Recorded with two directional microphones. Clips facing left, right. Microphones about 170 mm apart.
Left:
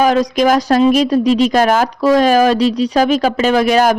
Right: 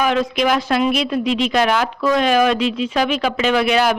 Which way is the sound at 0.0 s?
40° left (ahead or behind).